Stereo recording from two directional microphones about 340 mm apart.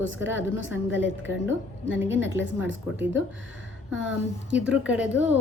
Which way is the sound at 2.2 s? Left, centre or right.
Centre.